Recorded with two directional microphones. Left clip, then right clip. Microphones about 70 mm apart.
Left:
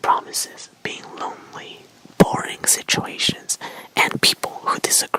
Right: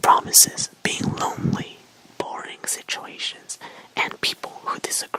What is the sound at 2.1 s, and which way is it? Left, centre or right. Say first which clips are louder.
Whispering: left 12 dB; left.